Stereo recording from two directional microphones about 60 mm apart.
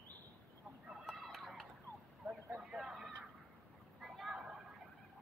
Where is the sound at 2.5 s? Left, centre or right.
Centre.